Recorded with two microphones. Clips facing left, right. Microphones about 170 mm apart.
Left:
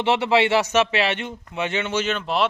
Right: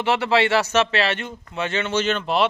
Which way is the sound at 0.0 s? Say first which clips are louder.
Left 1 dB; 20° left (ahead or behind).